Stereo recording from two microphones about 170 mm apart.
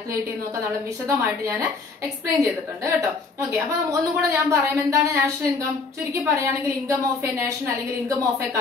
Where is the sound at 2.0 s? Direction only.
20° right (ahead or behind).